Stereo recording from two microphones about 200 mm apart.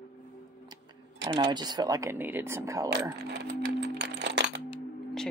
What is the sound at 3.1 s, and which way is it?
Music, 55° right (ahead or behind).